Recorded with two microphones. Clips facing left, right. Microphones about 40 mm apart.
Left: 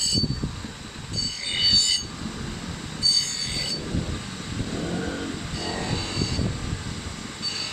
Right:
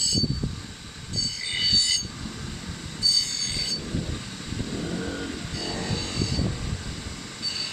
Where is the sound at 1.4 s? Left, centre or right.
Left.